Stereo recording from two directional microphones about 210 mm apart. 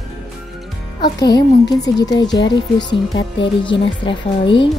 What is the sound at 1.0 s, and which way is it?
A child's voice, 20° left (ahead or behind).